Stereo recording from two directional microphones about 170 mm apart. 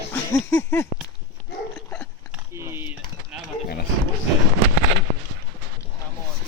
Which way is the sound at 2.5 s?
15° right (ahead or behind).